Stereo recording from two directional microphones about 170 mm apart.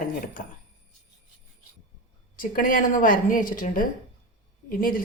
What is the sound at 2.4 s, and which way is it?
A woman's voice, 55° left (ahead or behind).